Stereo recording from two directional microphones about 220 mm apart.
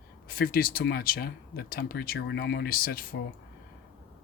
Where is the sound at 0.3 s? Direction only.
45° left (ahead or behind).